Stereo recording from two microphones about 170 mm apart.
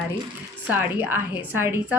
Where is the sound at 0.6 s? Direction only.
10° right (ahead or behind).